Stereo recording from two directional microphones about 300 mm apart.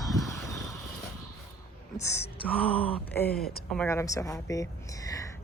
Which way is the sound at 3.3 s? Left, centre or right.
Left.